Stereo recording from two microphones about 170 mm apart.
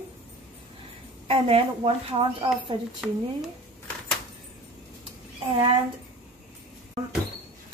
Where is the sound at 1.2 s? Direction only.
35° right (ahead or behind).